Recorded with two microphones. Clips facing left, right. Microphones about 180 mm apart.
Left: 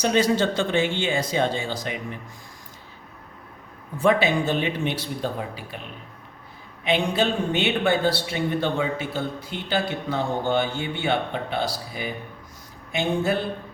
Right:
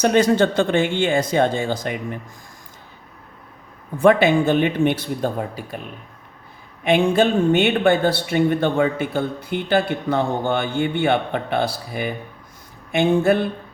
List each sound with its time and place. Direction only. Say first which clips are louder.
0.0 s speech: right 5 dB; 55° right (ahead or behind)
4.0 s speech: right 6 dB; 55° right (ahead or behind)
6.8 s speech: right 6 dB; 50° right (ahead or behind)